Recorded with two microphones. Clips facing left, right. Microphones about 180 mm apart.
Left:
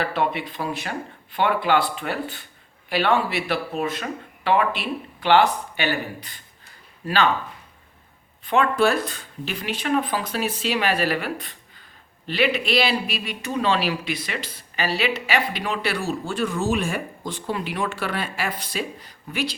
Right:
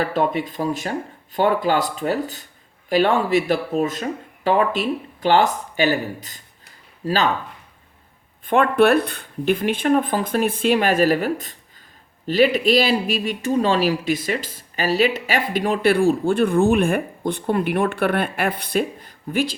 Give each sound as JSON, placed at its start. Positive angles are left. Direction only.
{"t": 0.0, "sound": "speech", "side_deg": -45}
{"t": 8.4, "sound": "speech", "side_deg": -55}